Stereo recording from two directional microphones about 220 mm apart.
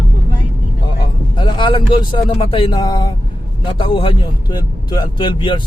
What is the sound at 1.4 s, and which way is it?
Speech, 20° left (ahead or behind).